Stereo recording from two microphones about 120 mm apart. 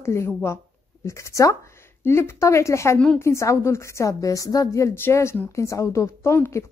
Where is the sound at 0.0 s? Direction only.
25° left (ahead or behind).